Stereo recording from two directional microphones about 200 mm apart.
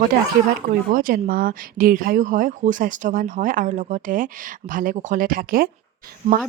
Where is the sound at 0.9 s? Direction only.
45° right (ahead or behind).